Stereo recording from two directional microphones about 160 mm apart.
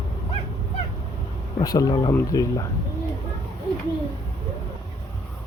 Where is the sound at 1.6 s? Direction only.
25° left (ahead or behind).